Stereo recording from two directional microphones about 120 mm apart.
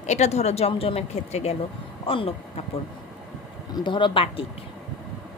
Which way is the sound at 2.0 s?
50° left (ahead or behind).